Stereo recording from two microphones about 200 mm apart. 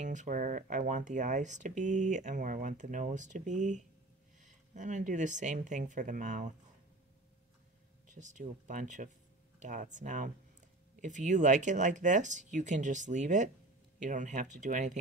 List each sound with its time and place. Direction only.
0.0 s speech: 35° right (ahead or behind)
8.1 s speech: 35° right (ahead or behind)